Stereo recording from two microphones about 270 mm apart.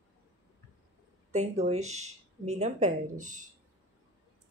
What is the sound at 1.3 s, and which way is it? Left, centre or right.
A woman's voice, right.